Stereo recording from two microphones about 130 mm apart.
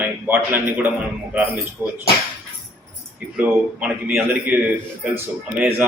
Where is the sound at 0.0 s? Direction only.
15° right (ahead or behind).